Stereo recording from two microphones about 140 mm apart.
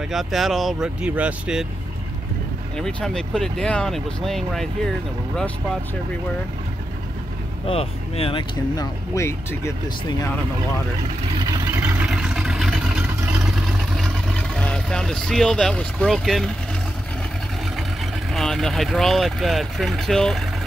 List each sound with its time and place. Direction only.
0.1 s speech: centre (ahead or behind)
2.8 s speech: 5° left (ahead or behind)
7.6 s speech: 45° left (ahead or behind)
9.1 s speech: 20° left (ahead or behind)
11.5 s vehicle: 15° right (ahead or behind)
12.1 s vehicle: 5° right (ahead or behind)
18.3 s speech: 5° left (ahead or behind)